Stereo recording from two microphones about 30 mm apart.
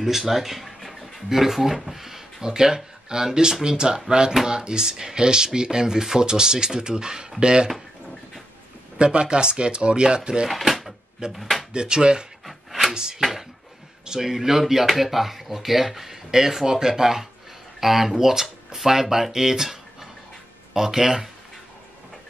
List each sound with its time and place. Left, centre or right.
0.0 s speech: centre
2.4 s speech: right
8.9 s speech: right
10.7 s drawer open or close: centre
11.3 s speech: centre
11.7 s speech: right
13.2 s a sound: centre
14.3 s speech: centre